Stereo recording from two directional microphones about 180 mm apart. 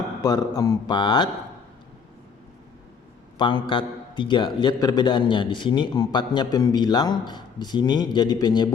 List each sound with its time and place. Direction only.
0.2 s a man's voice: 20° left (ahead or behind)
3.3 s a man's voice: 25° left (ahead or behind)